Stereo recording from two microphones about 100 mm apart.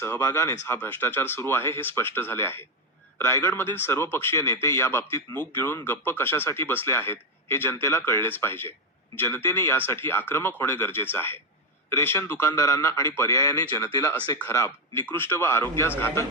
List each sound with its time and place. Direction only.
0.0 s speech: 20° left (ahead or behind)
0.8 s speech: 20° left (ahead or behind)
14.2 s speech: 15° left (ahead or behind)
14.5 s speech: 30° left (ahead or behind)